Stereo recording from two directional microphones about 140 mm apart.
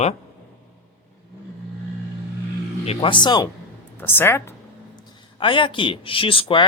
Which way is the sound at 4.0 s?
15° left (ahead or behind).